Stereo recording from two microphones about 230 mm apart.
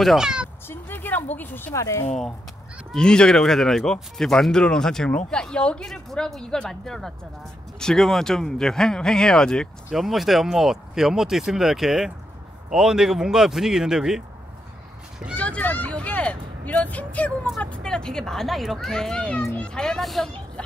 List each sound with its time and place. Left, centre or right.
0.0 s speech: centre
0.7 s a sound: centre
2.9 s speech: centre